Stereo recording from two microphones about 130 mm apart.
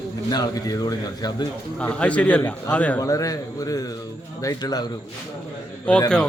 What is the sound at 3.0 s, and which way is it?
A man's voice, 25° left (ahead or behind).